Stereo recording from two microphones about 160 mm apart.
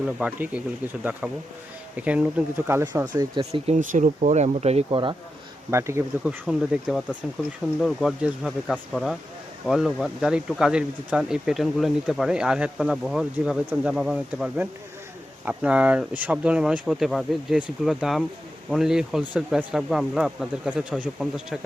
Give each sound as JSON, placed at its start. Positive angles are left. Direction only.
{"t": 0.0, "sound": "speech", "side_deg": -10}
{"t": 3.1, "sound": "speech", "side_deg": -30}
{"t": 3.7, "sound": "speech", "side_deg": -50}
{"t": 4.9, "sound": "speech", "side_deg": -30}
{"t": 5.7, "sound": "speech", "side_deg": -15}
{"t": 6.4, "sound": "speech", "side_deg": -5}